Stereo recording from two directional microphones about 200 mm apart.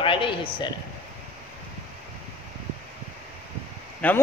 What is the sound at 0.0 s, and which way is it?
Speech, 25° left (ahead or behind).